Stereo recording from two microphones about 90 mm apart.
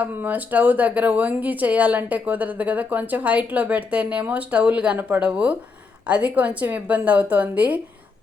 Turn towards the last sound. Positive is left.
turn(degrees=-15)  # may be behind; listen again after turning